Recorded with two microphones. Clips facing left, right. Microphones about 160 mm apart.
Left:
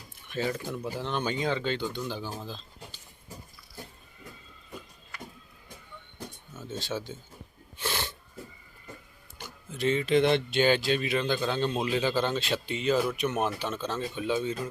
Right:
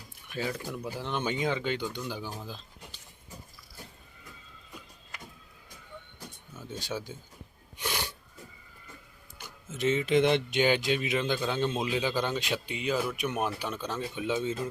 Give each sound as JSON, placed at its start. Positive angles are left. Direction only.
{"t": 0.3, "sound": "speech", "side_deg": -10}
{"t": 6.7, "sound": "speech", "side_deg": -15}
{"t": 7.8, "sound": "sneeze", "side_deg": -15}
{"t": 9.7, "sound": "speech", "side_deg": -20}